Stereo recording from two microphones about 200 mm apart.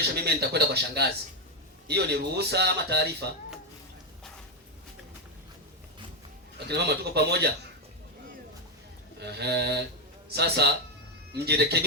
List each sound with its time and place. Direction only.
0.0 s speech: 55° right (ahead or behind)
6.7 s speech: 55° right (ahead or behind)
9.2 s speech: 55° right (ahead or behind)